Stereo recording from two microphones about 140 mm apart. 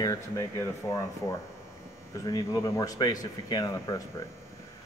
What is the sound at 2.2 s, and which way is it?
A man's voice, 25° left (ahead or behind).